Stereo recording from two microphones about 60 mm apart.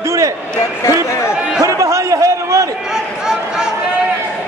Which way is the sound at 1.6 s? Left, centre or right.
Right.